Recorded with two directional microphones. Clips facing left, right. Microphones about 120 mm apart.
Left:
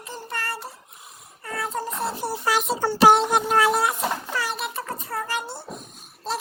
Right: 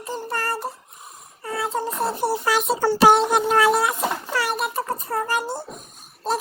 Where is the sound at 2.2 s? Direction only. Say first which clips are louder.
Right 9 dB; 65° right (ahead or behind).